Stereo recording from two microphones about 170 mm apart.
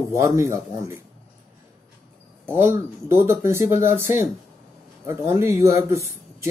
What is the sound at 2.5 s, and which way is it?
Speech, 15° right (ahead or behind).